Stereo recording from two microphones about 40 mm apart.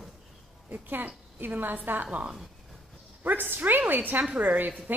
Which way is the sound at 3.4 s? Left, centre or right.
Right.